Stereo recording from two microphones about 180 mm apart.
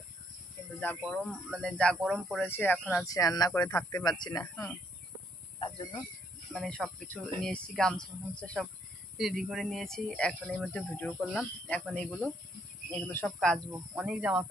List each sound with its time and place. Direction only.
0.7 s speech: 5° left (ahead or behind)
2.5 s speech: 10° left (ahead or behind)
3.1 s a man's voice: 20° left (ahead or behind)
6.5 s speech: centre (ahead or behind)
13.9 s speech: 5° right (ahead or behind)